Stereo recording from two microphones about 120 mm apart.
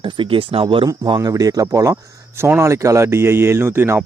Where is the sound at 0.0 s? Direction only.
45° right (ahead or behind).